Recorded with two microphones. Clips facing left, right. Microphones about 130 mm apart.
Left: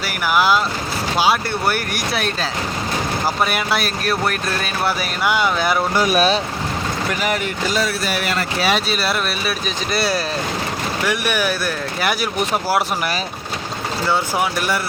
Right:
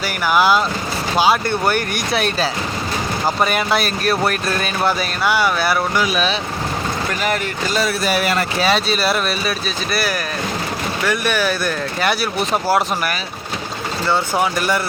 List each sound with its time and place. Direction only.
0.3 s speech: centre (ahead or behind)
5.2 s speech: 20° left (ahead or behind)
6.0 s speech: 40° left (ahead or behind)
7.1 s speech: 10° left (ahead or behind)
9.6 s speech: 25° left (ahead or behind)
11.0 s speech: 10° left (ahead or behind)
14.1 s speech: 5° left (ahead or behind)